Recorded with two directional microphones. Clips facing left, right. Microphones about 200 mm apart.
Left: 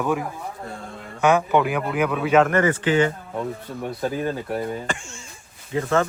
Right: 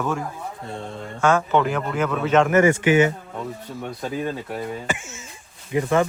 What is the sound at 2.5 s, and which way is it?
Speech, 10° right (ahead or behind).